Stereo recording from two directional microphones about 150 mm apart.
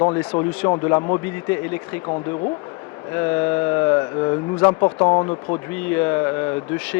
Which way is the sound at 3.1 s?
15° left (ahead or behind).